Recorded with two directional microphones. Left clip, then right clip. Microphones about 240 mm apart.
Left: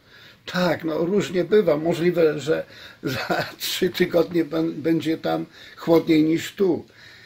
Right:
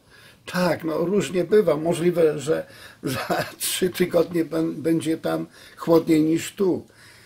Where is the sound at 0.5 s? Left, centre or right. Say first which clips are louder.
Even; centre.